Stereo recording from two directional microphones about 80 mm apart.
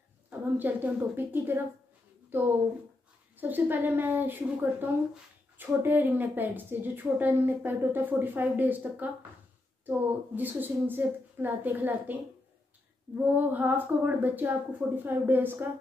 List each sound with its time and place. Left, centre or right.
0.6 s a woman's voice: right
2.2 s a sound: right
3.3 s a woman's voice: right